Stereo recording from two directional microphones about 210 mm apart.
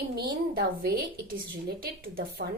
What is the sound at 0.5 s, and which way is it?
A woman's voice, 50° right (ahead or behind).